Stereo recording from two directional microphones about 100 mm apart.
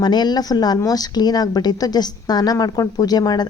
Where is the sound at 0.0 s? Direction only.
45° left (ahead or behind).